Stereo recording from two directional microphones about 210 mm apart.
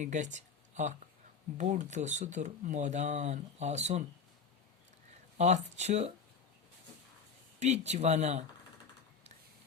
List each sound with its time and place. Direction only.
0.0 s speech: 35° right (ahead or behind)
5.4 s speech: 35° right (ahead or behind)
7.6 s speech: 30° right (ahead or behind)